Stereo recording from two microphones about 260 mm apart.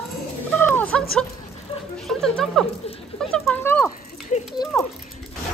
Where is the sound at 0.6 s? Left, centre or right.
Centre.